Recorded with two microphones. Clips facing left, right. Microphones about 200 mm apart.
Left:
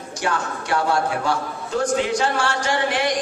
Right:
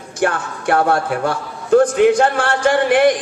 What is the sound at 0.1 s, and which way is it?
A woman's voice, 55° right (ahead or behind).